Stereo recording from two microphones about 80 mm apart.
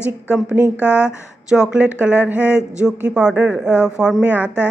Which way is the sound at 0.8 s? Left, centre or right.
Centre.